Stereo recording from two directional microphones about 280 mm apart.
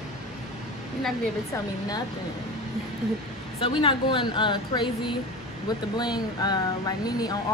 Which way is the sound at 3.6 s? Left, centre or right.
Centre.